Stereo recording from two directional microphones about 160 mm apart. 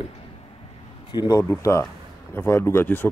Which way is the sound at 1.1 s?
25° left (ahead or behind).